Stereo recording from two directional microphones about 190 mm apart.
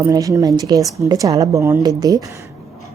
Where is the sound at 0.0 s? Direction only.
20° right (ahead or behind).